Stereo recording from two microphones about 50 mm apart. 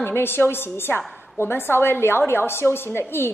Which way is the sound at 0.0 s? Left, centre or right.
Left.